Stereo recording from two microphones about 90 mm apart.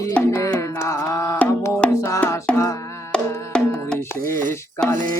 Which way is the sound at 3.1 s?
10° left (ahead or behind).